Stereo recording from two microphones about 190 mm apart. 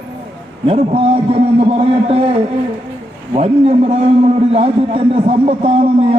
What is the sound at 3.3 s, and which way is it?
A man's voice, 35° right (ahead or behind).